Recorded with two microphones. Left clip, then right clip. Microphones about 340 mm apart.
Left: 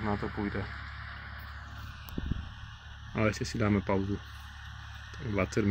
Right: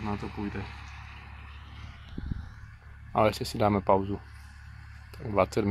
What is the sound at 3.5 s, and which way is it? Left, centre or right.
Speech, right.